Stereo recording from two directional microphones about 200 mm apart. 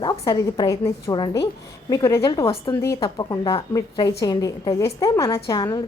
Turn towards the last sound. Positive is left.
turn(degrees=20)  # may be behind; listen again after turning